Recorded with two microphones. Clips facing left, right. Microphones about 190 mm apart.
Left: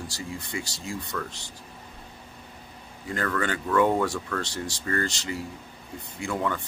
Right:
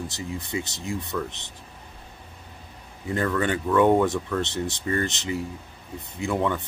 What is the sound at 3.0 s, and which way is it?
Speech, 15° right (ahead or behind).